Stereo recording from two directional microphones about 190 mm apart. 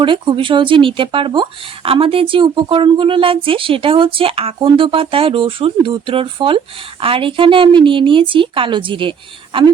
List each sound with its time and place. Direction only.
0.0 s speech: 25° right (ahead or behind)